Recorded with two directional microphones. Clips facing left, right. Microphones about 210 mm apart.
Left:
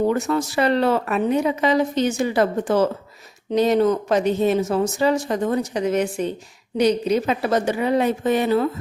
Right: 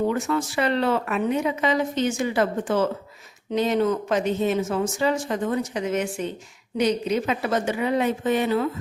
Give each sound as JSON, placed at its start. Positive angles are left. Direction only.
{"t": 0.1, "sound": "speech", "side_deg": 40}